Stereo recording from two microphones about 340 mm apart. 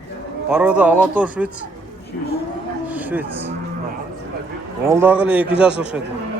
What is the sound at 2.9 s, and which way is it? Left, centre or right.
Speech, centre.